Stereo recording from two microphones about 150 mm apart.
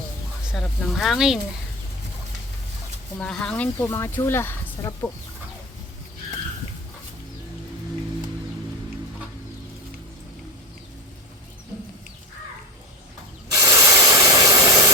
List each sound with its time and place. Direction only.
0.5 s speech: centre (ahead or behind)
3.2 s speech: 5° left (ahead or behind)
3.8 s speech: 15° left (ahead or behind)
13.5 s rub: 25° right (ahead or behind)